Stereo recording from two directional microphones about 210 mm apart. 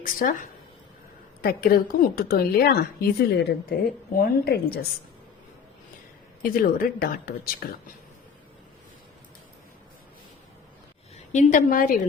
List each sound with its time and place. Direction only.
0.0 s a woman's voice: 40° left (ahead or behind)
6.4 s a woman's voice: 40° left (ahead or behind)
11.3 s a woman's voice: 35° left (ahead or behind)